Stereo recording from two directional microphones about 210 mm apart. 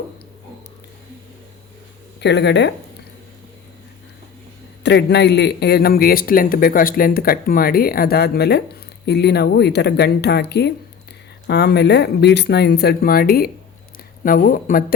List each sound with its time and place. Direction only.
2.2 s speech: 55° left (ahead or behind)
4.8 s a man's voice: 55° left (ahead or behind)